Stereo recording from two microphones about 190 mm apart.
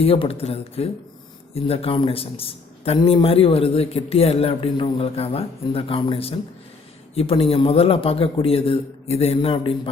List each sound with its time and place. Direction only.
0.0 s a man's voice: 30° left (ahead or behind)